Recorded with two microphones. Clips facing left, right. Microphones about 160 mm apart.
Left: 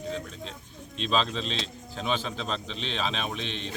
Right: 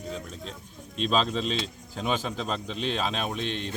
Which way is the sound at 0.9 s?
5° right (ahead or behind).